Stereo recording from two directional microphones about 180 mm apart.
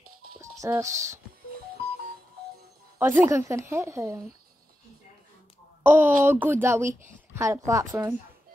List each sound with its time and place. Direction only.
0.4 s speech: 15° right (ahead or behind)
3.0 s a woman's voice: 10° right (ahead or behind)
5.9 s a woman's voice: 10° right (ahead or behind)